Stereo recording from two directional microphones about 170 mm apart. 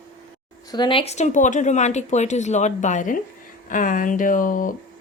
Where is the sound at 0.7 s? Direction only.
25° left (ahead or behind); by 4.8 s 55° left (ahead or behind).